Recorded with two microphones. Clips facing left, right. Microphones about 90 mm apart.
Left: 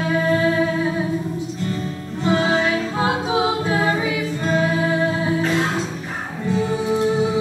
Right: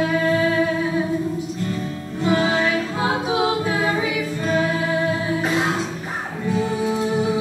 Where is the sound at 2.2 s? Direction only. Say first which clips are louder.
Left 1 dB; 15° left (ahead or behind).